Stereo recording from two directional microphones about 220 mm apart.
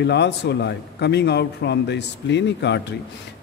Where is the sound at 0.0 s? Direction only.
50° left (ahead or behind).